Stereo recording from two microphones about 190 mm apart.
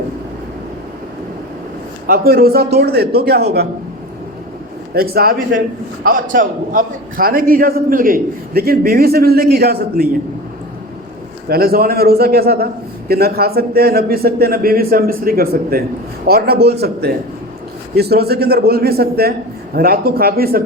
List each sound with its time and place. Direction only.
2.0 s a man's voice: 50° right (ahead or behind)
4.9 s a man's voice: 55° right (ahead or behind)
11.4 s a man's voice: 55° right (ahead or behind)
17.9 s a man's voice: 55° right (ahead or behind)